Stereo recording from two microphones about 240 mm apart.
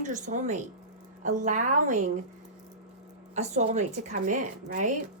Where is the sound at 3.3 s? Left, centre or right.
Right.